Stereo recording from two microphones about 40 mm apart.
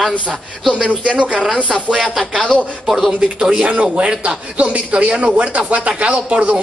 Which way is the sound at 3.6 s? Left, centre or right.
Right.